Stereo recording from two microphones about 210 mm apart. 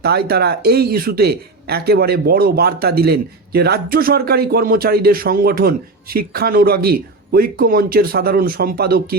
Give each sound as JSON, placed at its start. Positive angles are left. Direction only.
{"t": 0.0, "sound": "speech", "side_deg": -50}